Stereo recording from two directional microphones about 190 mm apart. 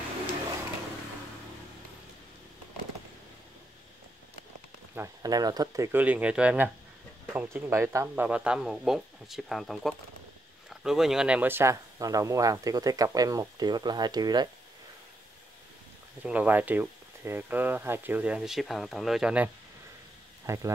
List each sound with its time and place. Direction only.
4.9 s speech: 15° right (ahead or behind)
16.2 s speech: 10° right (ahead or behind)